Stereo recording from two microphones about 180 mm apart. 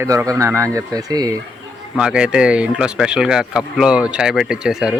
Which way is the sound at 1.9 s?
5° right (ahead or behind).